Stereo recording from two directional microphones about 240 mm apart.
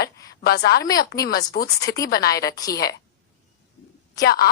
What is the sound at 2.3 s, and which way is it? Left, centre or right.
Speech, centre.